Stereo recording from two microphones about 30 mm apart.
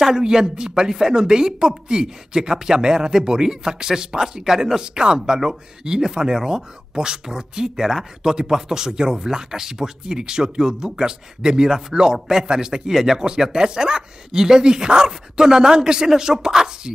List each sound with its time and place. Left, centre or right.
0.0 s speech: right
12.9 s speech: centre